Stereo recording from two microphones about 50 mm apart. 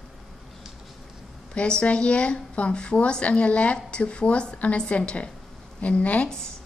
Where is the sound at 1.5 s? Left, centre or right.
Left.